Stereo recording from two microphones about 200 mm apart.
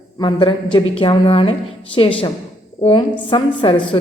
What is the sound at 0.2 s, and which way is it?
A woman's voice, 25° left (ahead or behind).